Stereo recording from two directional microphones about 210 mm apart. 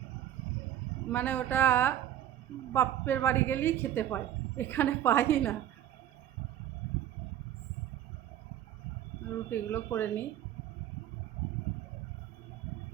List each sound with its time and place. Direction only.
1.1 s a woman's voice: 10° left (ahead or behind)
9.5 s a woman's voice: 10° left (ahead or behind)